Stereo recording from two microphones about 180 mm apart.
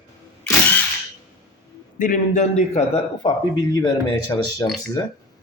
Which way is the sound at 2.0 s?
45° left (ahead or behind).